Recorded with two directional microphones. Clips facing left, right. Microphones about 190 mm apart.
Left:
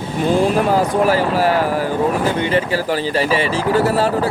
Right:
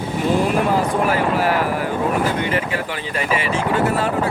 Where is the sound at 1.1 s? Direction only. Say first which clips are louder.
Left 3 dB; 30° left (ahead or behind).